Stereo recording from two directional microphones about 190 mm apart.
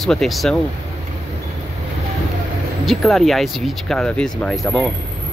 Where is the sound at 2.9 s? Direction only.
Centre (ahead or behind).